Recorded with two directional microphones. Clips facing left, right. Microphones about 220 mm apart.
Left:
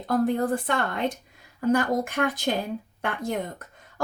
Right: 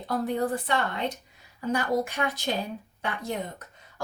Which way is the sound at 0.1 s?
50° left (ahead or behind).